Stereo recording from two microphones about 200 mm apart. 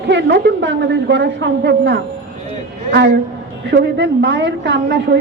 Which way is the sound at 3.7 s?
60° right (ahead or behind).